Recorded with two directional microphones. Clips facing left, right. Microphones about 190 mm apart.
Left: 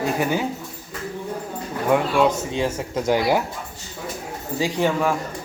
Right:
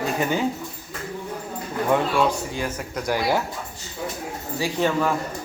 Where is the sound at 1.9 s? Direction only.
20° left (ahead or behind).